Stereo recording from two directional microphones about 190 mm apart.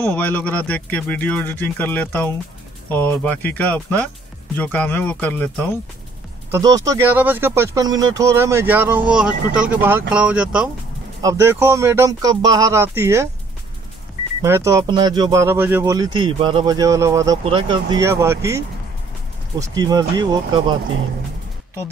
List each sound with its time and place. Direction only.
0.1 s speech: 10° left (ahead or behind)
6.5 s speech: 20° right (ahead or behind)
14.4 s speech: 15° right (ahead or behind)
17.4 s speech: 25° right (ahead or behind)
19.7 s speech: 20° right (ahead or behind)